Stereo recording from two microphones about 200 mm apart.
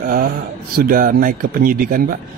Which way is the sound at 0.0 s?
45° right (ahead or behind).